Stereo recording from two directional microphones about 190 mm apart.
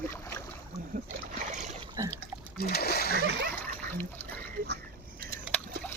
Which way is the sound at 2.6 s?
55° left (ahead or behind).